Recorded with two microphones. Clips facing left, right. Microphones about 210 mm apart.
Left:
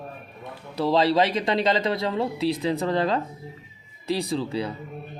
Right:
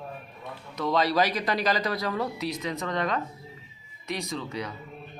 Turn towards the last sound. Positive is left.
turn(degrees=30)  # may be behind; listen again after turning